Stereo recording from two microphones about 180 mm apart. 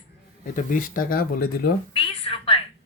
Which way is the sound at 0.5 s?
50° left (ahead or behind).